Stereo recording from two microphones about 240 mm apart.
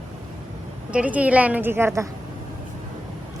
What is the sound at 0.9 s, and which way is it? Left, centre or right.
Speech, centre.